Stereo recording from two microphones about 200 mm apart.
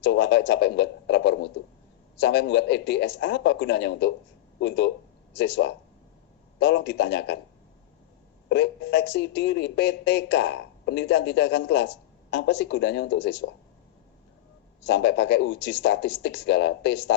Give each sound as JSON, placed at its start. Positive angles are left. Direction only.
{"t": 0.0, "sound": "speech", "side_deg": 60}
{"t": 8.4, "sound": "speech", "side_deg": 60}
{"t": 14.8, "sound": "speech", "side_deg": 60}